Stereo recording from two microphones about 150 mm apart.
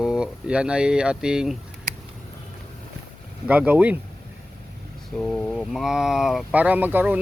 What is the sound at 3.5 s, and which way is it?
Speech, 10° right (ahead or behind).